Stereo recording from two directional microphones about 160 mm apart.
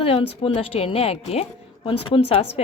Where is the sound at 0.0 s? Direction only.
35° left (ahead or behind).